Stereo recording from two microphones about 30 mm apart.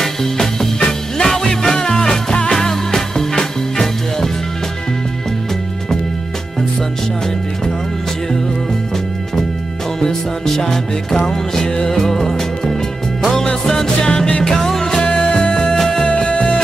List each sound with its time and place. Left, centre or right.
0.0 s music: centre
10.0 s music: centre
14.0 s music: left
14.4 s music: centre
15.0 s music: left
15.5 s music: left
16.3 s music: left